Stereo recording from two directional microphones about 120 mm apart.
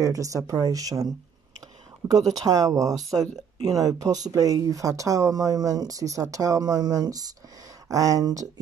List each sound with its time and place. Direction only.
0.0 s speech: 25° right (ahead or behind)
2.4 s speech: 30° right (ahead or behind)